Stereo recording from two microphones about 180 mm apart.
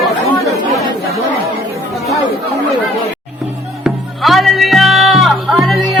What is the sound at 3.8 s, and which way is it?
Music, centre (ahead or behind).